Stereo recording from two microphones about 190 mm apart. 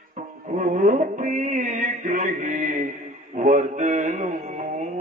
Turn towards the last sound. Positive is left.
turn(degrees=-40)  # may be behind; listen again after turning